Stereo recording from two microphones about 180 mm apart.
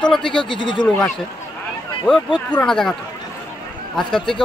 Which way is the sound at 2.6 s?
5° left (ahead or behind).